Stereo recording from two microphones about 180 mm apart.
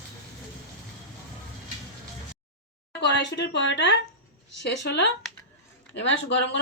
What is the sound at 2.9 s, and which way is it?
A woman's voice, 70° left (ahead or behind).